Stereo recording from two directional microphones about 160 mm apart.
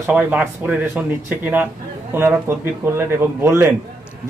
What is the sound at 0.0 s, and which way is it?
Speech, 10° right (ahead or behind).